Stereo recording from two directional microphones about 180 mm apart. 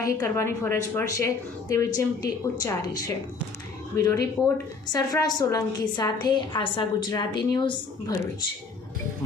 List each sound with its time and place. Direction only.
0.0 s a woman's voice: 15° left (ahead or behind)